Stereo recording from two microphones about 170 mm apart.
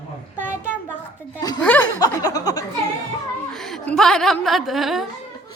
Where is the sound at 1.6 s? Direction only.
10° left (ahead or behind).